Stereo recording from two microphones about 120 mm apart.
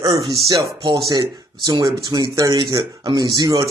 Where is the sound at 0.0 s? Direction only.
35° right (ahead or behind).